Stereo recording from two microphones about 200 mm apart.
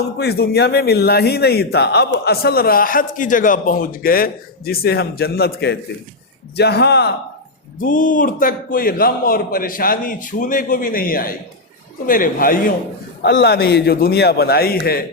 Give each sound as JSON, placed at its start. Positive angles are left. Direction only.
{"t": 0.2, "sound": "a man's voice", "side_deg": 55}
{"t": 7.8, "sound": "a man's voice", "side_deg": 45}
{"t": 13.2, "sound": "a man's voice", "side_deg": 55}